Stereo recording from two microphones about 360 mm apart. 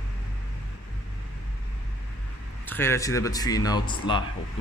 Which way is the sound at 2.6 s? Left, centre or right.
Centre.